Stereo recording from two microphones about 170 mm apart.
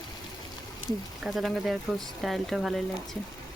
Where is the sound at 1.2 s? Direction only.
Centre (ahead or behind).